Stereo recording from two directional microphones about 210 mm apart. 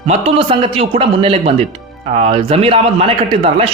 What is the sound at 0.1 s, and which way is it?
A man's voice, 30° right (ahead or behind).